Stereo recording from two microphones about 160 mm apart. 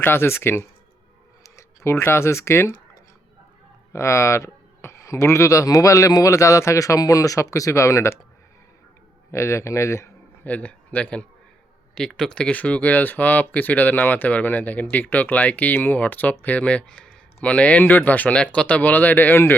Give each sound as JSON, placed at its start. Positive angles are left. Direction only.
{"t": 0.0, "sound": "speech", "side_deg": 15}
{"t": 9.3, "sound": "speech", "side_deg": 15}